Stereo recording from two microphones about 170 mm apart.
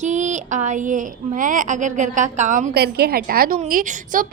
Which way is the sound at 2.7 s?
65° right (ahead or behind).